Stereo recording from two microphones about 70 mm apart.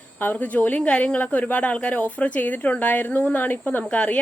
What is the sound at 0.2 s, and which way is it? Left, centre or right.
A woman's voice, left.